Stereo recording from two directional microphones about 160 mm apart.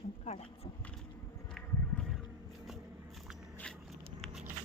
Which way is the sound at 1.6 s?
Centre (ahead or behind).